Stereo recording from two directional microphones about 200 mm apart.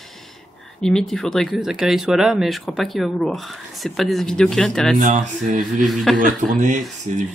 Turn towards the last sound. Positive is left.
turn(degrees=-40)  # may be behind; listen again after turning